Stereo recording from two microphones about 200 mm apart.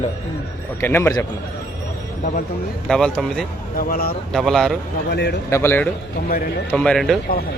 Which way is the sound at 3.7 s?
45° left (ahead or behind).